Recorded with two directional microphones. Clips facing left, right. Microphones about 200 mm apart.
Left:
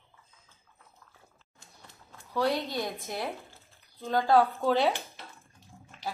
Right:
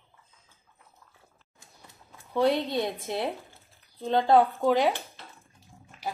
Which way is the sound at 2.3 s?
25° right (ahead or behind).